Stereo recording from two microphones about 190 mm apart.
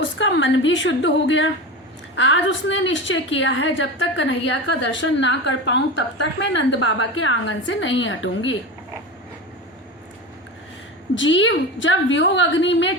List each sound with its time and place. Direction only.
0.0 s a woman's voice: 75° left (ahead or behind)
11.1 s a woman's voice: 80° left